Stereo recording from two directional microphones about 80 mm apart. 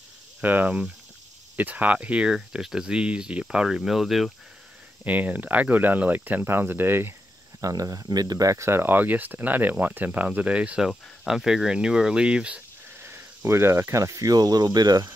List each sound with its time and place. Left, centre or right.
0.4 s speech: right; by 4.3 s centre
5.0 s speech: right
7.6 s speech: right; by 12.6 s centre
13.0 s speech: right